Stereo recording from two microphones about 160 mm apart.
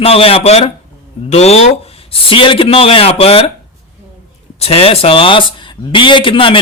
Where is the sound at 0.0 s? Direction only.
35° left (ahead or behind).